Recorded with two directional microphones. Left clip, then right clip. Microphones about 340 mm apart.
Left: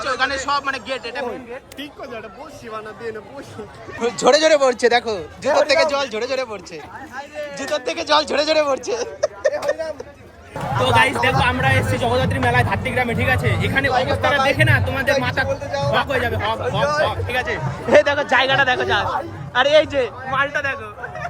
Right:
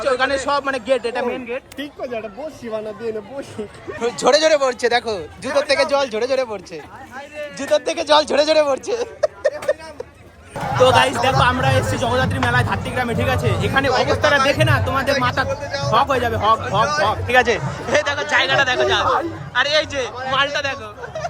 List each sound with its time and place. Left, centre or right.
0.0 s speech: centre
4.0 s a man's voice: centre
7.6 s speech: centre
10.8 s speech: centre
13.9 s speech: centre
14.6 s speech: centre
15.4 s a man's voice: centre
15.9 s speech: centre
16.8 s a man's voice: centre
17.1 s speech: right
17.8 s speech: centre
20.1 s speech: centre
20.4 s speech: centre